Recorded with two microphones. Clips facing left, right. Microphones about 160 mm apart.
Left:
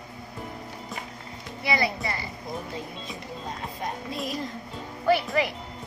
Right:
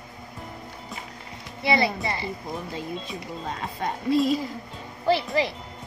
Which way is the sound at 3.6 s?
90° right.